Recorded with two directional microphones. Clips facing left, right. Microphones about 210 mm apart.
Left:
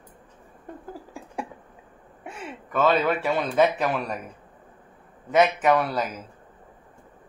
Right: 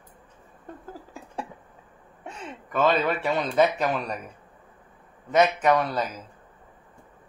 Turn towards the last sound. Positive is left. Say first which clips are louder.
# left 1 dB
turn(degrees=5)  # may be behind; listen again after turning